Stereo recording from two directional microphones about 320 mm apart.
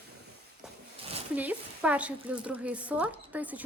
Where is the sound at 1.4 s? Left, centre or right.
Centre.